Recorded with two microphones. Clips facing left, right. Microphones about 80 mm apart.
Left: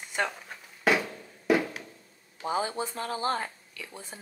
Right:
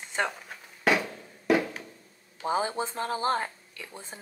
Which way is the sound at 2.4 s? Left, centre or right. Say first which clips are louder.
Right 2 dB; right.